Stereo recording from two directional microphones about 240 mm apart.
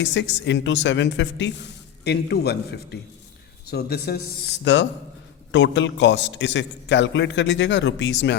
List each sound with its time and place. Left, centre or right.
0.0 s speech: left